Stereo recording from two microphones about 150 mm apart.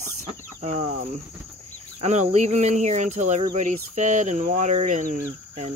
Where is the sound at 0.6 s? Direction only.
45° right (ahead or behind).